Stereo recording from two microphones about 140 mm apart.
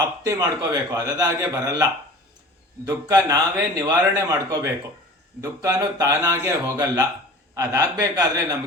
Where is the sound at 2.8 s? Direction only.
25° right (ahead or behind).